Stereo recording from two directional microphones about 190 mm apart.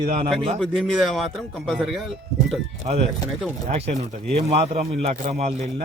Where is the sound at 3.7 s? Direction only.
30° right (ahead or behind).